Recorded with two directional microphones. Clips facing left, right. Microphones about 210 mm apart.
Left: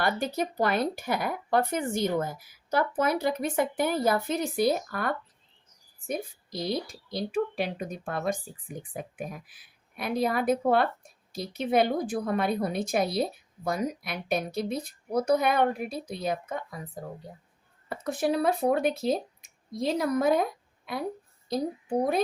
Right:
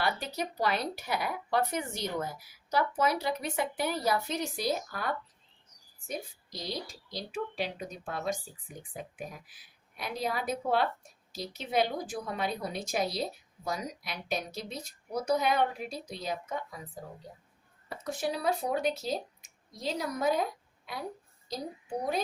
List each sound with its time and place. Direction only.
0.0 s speech: 50° left (ahead or behind)
17.8 s speech: 55° left (ahead or behind)